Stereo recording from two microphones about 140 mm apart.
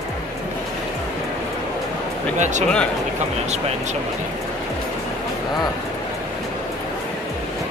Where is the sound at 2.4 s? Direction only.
60° right (ahead or behind).